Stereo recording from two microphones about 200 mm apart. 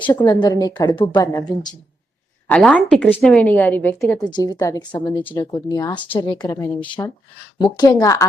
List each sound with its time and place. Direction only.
0.0 s a woman's voice: 20° left (ahead or behind)
2.5 s a woman's voice: 5° left (ahead or behind)
4.3 s a woman's voice: 20° left (ahead or behind)